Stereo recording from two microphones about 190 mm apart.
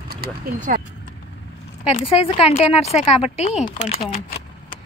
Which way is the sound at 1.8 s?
30° left (ahead or behind).